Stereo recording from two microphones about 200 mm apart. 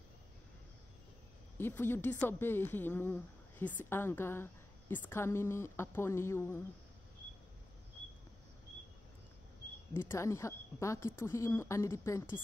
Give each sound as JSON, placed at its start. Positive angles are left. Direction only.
{"t": 1.6, "sound": "a woman's voice", "side_deg": 10}
{"t": 9.9, "sound": "a woman's voice", "side_deg": 15}